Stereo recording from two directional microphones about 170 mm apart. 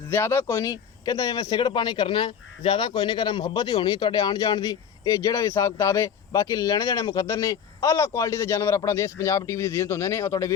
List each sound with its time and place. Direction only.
0.1 s speech: 15° left (ahead or behind)